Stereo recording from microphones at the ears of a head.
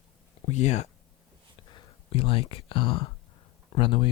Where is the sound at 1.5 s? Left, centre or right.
Left.